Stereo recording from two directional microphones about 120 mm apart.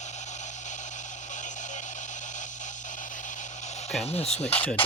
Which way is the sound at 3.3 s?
75° left (ahead or behind).